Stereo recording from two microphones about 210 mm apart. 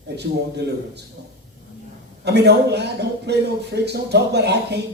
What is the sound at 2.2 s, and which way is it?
A man's voice, 50° right (ahead or behind).